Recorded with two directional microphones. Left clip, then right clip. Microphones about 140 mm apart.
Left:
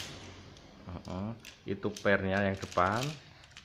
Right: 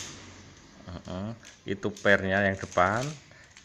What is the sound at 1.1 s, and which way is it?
Speech, 15° right (ahead or behind).